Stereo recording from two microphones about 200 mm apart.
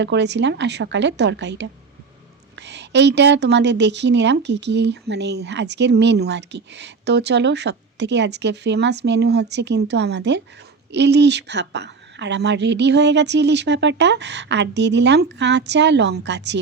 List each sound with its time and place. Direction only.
0.0 s a woman's voice: 60° right (ahead or behind)